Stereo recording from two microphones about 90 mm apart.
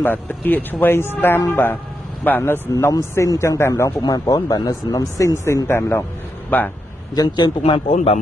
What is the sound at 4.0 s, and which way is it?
Speech, 50° left (ahead or behind).